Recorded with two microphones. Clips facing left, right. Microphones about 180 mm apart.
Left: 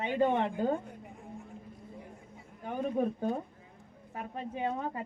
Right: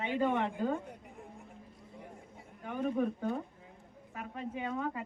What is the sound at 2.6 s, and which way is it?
Speech, 30° left (ahead or behind).